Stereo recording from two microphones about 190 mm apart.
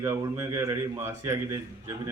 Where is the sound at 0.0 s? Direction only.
15° right (ahead or behind).